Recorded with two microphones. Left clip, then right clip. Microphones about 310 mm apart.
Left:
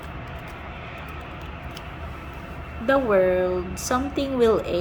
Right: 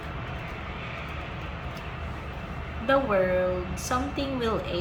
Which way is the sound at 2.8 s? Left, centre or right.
Centre.